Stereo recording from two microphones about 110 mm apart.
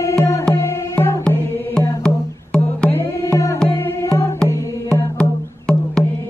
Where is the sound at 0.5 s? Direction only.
25° left (ahead or behind).